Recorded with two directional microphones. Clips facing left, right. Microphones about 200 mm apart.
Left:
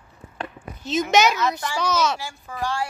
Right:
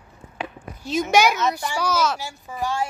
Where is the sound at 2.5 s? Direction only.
20° right (ahead or behind).